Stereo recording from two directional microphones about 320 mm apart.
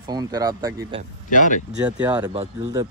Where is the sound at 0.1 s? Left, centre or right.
Centre.